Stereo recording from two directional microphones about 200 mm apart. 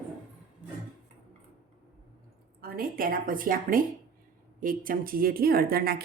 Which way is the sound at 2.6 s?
45° right (ahead or behind).